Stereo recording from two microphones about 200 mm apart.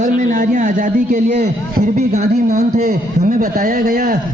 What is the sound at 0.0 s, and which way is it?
A man's voice, 40° right (ahead or behind).